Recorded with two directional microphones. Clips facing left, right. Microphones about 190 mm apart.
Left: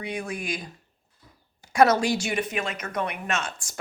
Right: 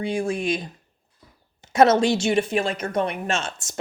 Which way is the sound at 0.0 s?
30° right (ahead or behind).